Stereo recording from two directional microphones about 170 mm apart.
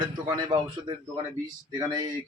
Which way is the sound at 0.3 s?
25° right (ahead or behind).